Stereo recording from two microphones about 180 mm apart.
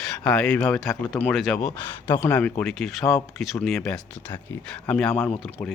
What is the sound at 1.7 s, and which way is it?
Speech, 15° left (ahead or behind).